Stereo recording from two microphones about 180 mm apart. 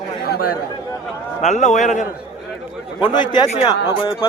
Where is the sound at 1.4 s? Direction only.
40° left (ahead or behind).